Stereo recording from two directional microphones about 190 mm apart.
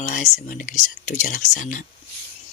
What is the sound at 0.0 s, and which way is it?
Speech, 40° left (ahead or behind).